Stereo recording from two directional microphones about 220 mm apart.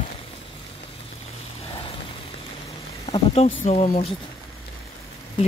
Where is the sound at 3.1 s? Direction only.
25° left (ahead or behind).